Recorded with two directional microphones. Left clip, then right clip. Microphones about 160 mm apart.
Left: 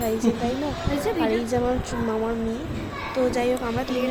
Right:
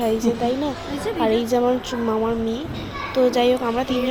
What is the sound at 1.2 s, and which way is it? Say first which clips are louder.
Speech: right 8 dB; 20° right (ahead or behind).